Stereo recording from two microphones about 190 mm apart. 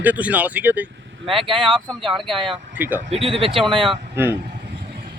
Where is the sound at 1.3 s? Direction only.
25° right (ahead or behind).